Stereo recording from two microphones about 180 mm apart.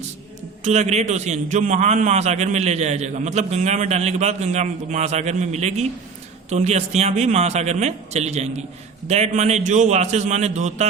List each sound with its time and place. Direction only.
0.6 s a man's voice: 40° right (ahead or behind)